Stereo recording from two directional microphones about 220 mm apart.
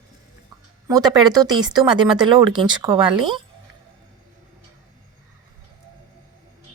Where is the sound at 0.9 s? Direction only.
15° right (ahead or behind).